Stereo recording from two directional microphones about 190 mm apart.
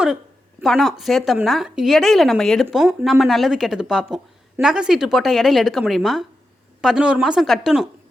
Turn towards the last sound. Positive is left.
turn(degrees=0)  # may be behind; listen again after turning